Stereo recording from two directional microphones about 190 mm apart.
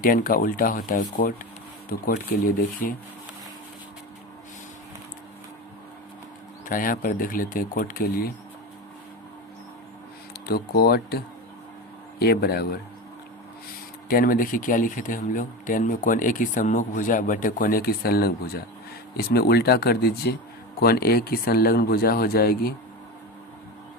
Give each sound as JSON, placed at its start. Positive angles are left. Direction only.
{"t": 0.0, "sound": "speech", "side_deg": 50}
{"t": 6.7, "sound": "speech", "side_deg": 45}
{"t": 10.3, "sound": "speech", "side_deg": 55}
{"t": 12.2, "sound": "speech", "side_deg": 55}
{"t": 14.1, "sound": "speech", "side_deg": 50}